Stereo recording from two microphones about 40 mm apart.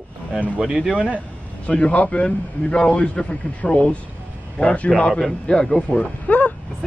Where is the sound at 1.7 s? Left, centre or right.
Left.